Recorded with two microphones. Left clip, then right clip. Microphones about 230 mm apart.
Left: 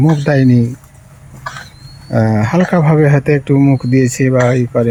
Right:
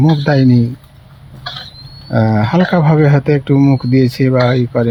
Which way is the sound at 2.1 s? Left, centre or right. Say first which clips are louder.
Even; centre.